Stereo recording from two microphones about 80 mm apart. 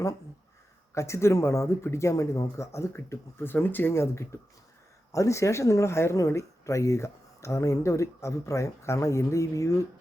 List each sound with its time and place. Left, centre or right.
0.9 s speech: left